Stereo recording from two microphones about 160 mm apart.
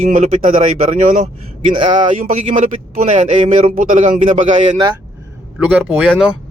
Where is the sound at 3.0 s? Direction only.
45° right (ahead or behind).